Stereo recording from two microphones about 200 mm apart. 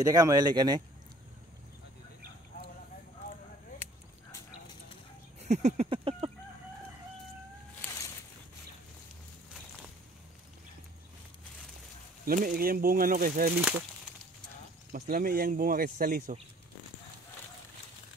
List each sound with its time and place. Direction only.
0.0 s speech: 15° right (ahead or behind)
5.4 s a sound: 35° right (ahead or behind)
12.3 s speech: 45° right (ahead or behind)
13.6 s speech: 5° right (ahead or behind)
14.9 s speech: 45° right (ahead or behind)